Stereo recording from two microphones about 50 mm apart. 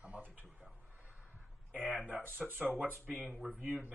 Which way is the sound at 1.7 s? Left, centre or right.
Right.